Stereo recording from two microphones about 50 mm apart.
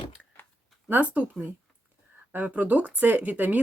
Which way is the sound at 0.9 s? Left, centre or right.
Right.